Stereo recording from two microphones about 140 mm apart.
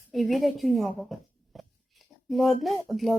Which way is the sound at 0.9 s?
Centre (ahead or behind).